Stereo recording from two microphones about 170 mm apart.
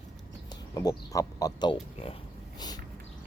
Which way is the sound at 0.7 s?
20° left (ahead or behind).